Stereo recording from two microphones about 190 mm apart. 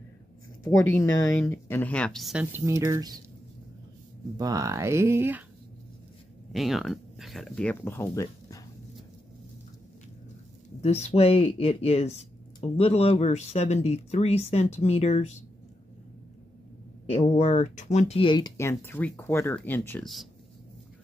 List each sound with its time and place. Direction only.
0.7 s speech: 15° left (ahead or behind)
2.5 s speech: 15° right (ahead or behind)
4.4 s speech: 20° right (ahead or behind)
6.5 s speech: centre (ahead or behind); by 8.6 s 15° left (ahead or behind)
10.8 s speech: 35° left (ahead or behind)
17.0 s speech: 35° left (ahead or behind)
18.6 s speech: 10° left (ahead or behind)